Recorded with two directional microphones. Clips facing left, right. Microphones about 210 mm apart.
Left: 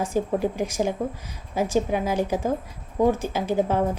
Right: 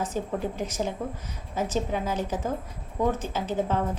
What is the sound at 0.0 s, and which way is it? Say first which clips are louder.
A woman's voice: left 5 dB; 10° left (ahead or behind).